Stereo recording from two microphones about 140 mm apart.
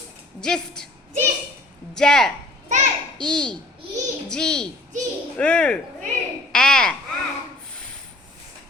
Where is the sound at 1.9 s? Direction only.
5° left (ahead or behind).